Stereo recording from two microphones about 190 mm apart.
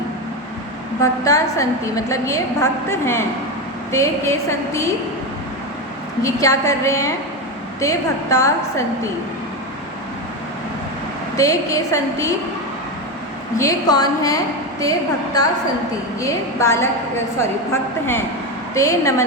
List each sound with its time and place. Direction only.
1.0 s a woman's voice: 15° left (ahead or behind)
6.2 s a woman's voice: 15° left (ahead or behind)
11.3 s a woman's voice: 15° left (ahead or behind)
13.6 s a woman's voice: 20° left (ahead or behind)